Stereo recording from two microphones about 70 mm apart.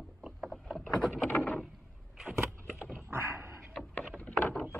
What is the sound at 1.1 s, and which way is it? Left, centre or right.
Rowboat, centre.